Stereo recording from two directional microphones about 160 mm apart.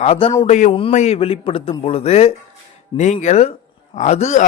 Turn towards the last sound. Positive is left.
turn(degrees=45)  # may be behind; listen again after turning